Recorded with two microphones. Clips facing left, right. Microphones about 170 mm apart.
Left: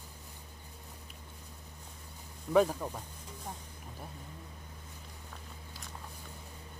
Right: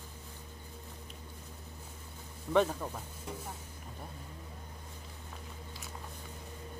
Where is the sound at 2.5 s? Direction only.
10° left (ahead or behind).